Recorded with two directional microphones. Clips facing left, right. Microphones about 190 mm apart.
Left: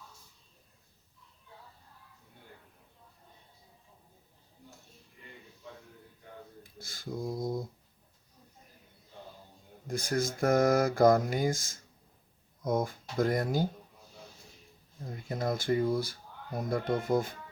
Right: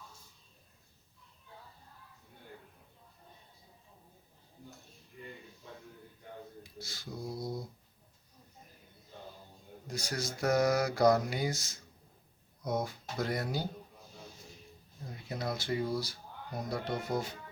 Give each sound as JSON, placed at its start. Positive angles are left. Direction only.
{"t": 6.6, "sound": "speech", "side_deg": 50}
{"t": 9.8, "sound": "mantra", "side_deg": 50}
{"t": 15.3, "sound": "mantra", "side_deg": 50}